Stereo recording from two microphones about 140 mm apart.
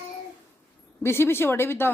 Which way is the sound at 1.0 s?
15° left (ahead or behind).